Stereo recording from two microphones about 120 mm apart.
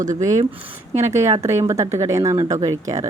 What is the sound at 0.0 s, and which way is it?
Speech, 90° right.